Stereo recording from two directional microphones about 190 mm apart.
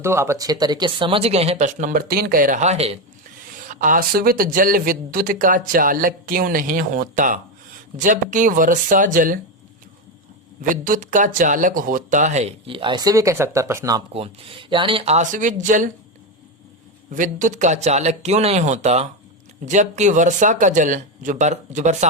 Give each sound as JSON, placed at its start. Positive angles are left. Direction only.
{"t": 0.0, "sound": "speech", "side_deg": -15}
{"t": 3.5, "sound": "speech", "side_deg": -45}
{"t": 10.6, "sound": "speech", "side_deg": -45}
{"t": 14.1, "sound": "speech", "side_deg": -30}
{"t": 17.2, "sound": "speech", "side_deg": -45}